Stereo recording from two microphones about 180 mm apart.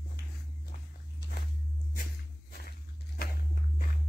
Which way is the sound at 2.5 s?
55° left (ahead or behind).